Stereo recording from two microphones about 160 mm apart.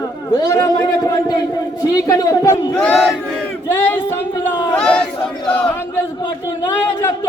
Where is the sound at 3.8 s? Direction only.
10° left (ahead or behind).